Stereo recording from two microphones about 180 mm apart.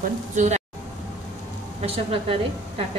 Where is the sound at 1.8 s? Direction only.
30° right (ahead or behind).